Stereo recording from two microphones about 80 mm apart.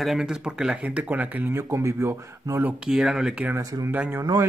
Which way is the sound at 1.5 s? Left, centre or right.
Right.